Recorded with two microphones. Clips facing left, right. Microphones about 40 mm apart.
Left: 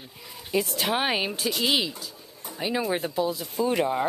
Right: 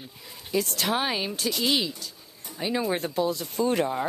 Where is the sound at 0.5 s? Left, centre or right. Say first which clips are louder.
Left 1 dB; centre.